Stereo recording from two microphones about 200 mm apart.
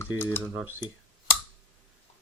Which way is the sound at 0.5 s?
10° right (ahead or behind).